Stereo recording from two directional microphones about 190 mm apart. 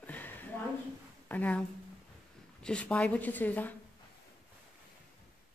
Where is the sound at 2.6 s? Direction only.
5° left (ahead or behind).